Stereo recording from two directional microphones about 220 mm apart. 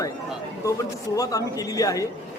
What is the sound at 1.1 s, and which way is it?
Speech, 15° left (ahead or behind).